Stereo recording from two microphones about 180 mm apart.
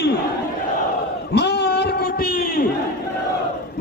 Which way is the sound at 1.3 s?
70° left (ahead or behind).